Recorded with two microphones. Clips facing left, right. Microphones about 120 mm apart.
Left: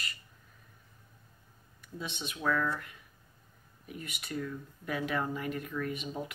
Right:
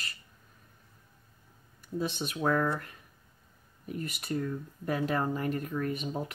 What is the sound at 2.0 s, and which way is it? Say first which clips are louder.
Speech: right 8 dB; 45° right (ahead or behind).